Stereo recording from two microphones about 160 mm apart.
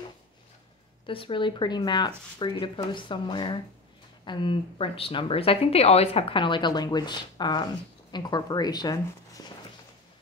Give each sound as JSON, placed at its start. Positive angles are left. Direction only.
{"t": 1.0, "sound": "a woman's voice", "side_deg": 35}